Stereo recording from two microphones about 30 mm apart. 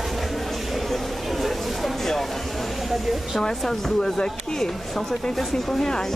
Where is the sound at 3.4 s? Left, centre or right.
Centre.